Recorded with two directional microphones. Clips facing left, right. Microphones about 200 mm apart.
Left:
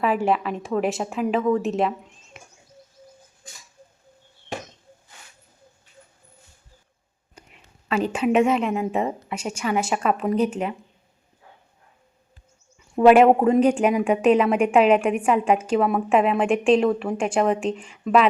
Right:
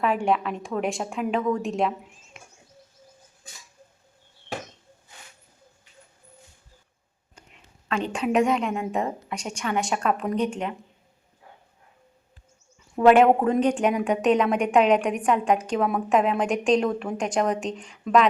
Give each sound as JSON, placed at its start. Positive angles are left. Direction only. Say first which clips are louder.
{"t": 0.0, "sound": "a woman's voice", "louder": "left 2 dB", "side_deg": 5}
{"t": 7.3, "sound": "a woman's voice", "louder": "left 3 dB", "side_deg": 5}
{"t": 13.0, "sound": "a woman's voice", "louder": "left 3 dB", "side_deg": 5}